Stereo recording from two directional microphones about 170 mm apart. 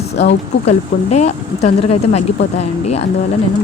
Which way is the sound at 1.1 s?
40° left (ahead or behind).